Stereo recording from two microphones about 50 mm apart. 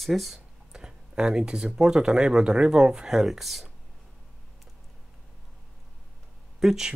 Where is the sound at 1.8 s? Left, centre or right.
Centre.